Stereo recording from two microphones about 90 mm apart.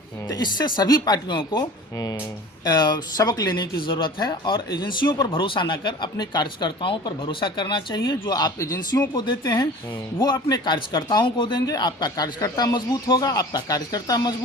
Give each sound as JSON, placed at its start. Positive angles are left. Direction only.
{"t": 0.3, "sound": "speech", "side_deg": 50}
{"t": 2.6, "sound": "speech", "side_deg": 55}
{"t": 5.3, "sound": "speech", "side_deg": 70}
{"t": 8.5, "sound": "speech", "side_deg": 40}
{"t": 11.6, "sound": "speech", "side_deg": 50}